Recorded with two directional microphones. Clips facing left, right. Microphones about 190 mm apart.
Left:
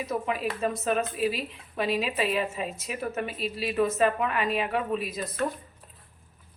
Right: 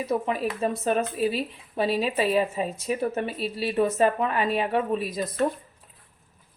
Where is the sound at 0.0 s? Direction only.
30° right (ahead or behind).